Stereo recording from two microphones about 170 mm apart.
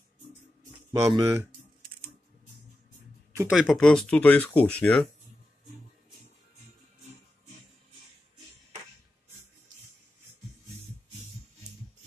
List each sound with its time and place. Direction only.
0.9 s speech: 15° right (ahead or behind)
3.3 s speech: 5° right (ahead or behind)